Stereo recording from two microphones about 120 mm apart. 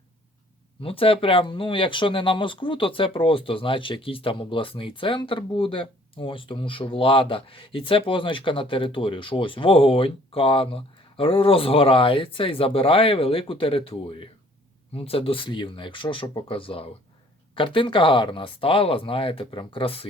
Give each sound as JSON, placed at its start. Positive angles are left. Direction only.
{"t": 0.8, "sound": "speech", "side_deg": 50}